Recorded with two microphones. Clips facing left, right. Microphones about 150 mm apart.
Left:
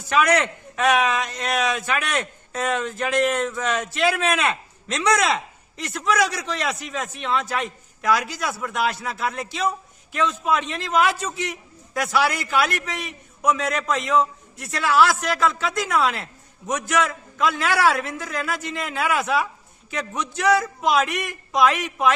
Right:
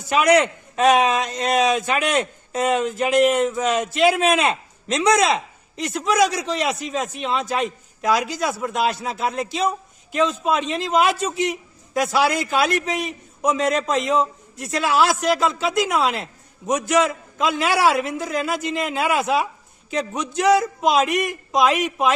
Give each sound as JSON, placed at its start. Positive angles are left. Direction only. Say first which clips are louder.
{"t": 0.1, "sound": "a man's voice", "louder": "right 3 dB", "side_deg": -20}